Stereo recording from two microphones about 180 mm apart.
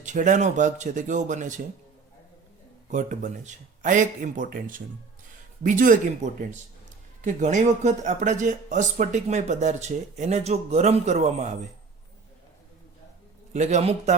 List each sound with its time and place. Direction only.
0.0 s speech: 45° right (ahead or behind)
2.9 s speech: 45° right (ahead or behind)
7.2 s speech: 45° right (ahead or behind)
13.5 s speech: 40° right (ahead or behind)